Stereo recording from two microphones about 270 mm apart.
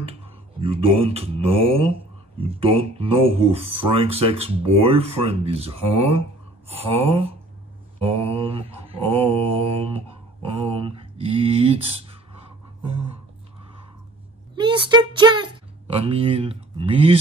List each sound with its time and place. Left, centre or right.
0.6 s mantra: right
14.5 s speech: centre
16.0 s mantra: right